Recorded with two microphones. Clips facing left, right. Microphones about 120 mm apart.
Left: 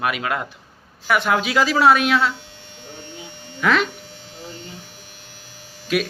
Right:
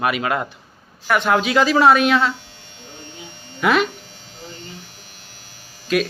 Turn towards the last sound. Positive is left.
turn(degrees=5)  # may be behind; listen again after turning